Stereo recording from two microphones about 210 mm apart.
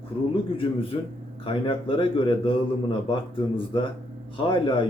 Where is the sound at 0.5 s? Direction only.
25° left (ahead or behind).